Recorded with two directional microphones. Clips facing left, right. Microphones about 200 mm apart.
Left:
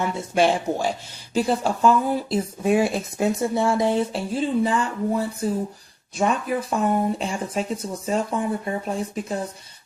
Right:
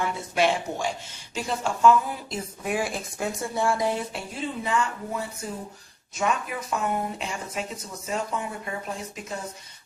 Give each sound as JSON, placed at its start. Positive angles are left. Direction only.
{"t": 0.0, "sound": "speech", "side_deg": 30}